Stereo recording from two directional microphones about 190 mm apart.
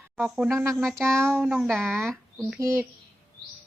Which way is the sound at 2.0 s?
Centre (ahead or behind).